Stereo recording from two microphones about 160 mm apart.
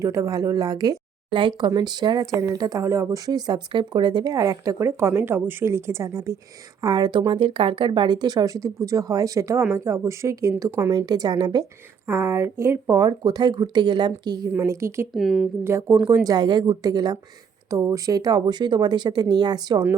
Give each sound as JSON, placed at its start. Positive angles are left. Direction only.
{"t": 0.0, "sound": "a woman's voice", "side_deg": -20}
{"t": 14.5, "sound": "a woman's voice", "side_deg": -15}
{"t": 15.1, "sound": "a woman's voice", "side_deg": 0}
{"t": 15.6, "sound": "a woman's voice", "side_deg": -15}